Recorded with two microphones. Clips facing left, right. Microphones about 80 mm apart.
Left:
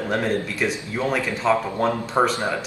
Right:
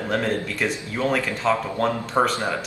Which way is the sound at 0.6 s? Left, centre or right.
Centre.